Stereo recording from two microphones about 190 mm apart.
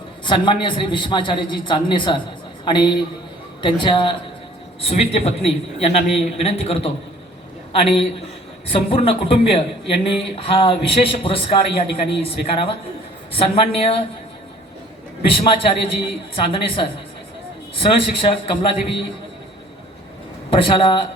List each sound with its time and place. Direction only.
0.3 s a man's voice: 25° left (ahead or behind)
15.3 s a man's voice: 30° left (ahead or behind)
20.5 s a man's voice: 30° left (ahead or behind)